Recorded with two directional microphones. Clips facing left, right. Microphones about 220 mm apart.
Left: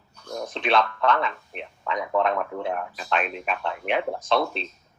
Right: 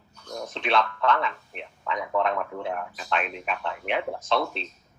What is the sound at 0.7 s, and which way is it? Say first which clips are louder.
Speech: left 2 dB; 40° left (ahead or behind).